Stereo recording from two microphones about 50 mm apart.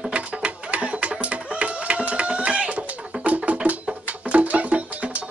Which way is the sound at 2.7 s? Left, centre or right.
Right.